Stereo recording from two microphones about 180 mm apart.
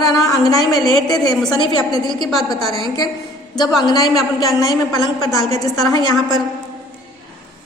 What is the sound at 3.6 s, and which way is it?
Speech, 20° left (ahead or behind).